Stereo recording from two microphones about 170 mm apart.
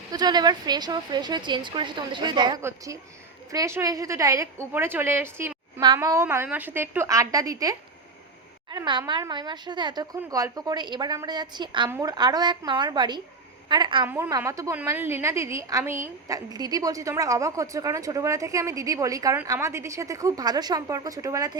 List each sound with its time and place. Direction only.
0.1 s a woman's voice: 25° right (ahead or behind)
5.8 s a woman's voice: 25° right (ahead or behind)